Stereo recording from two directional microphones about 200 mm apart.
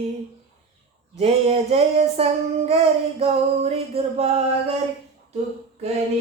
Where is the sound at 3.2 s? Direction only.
30° right (ahead or behind).